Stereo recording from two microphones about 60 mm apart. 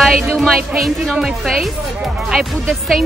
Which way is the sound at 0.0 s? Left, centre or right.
Centre.